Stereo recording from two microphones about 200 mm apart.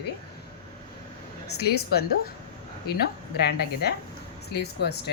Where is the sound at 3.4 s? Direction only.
55° left (ahead or behind).